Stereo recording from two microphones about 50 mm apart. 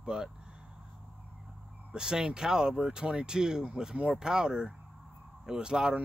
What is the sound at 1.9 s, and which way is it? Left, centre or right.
Speech, centre.